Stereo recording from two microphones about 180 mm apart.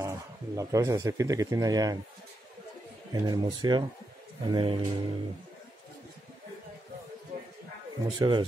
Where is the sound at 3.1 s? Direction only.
20° right (ahead or behind).